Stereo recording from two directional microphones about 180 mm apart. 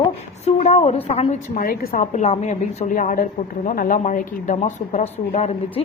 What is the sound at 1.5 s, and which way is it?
Speech, 55° left (ahead or behind).